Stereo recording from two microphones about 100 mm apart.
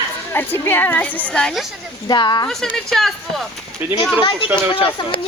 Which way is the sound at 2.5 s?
5° left (ahead or behind).